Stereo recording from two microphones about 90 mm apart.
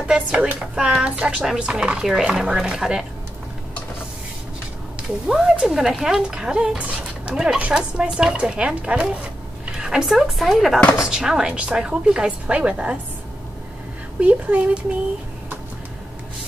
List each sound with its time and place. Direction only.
0.0 s speech: 10° right (ahead or behind)
5.3 s speech: 10° right (ahead or behind)
14.2 s speech: 15° right (ahead or behind)